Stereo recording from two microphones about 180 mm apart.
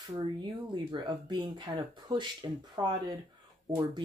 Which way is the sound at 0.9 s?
25° right (ahead or behind).